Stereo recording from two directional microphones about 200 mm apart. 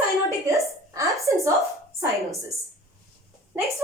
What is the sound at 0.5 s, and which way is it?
Speech, 15° right (ahead or behind).